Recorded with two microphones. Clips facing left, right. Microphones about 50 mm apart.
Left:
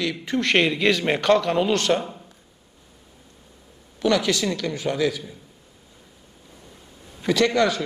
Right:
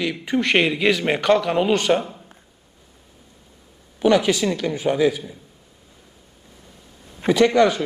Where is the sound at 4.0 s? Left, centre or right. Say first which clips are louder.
Right 4 dB; centre.